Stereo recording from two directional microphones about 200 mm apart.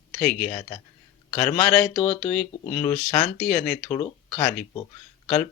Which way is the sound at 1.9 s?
30° left (ahead or behind).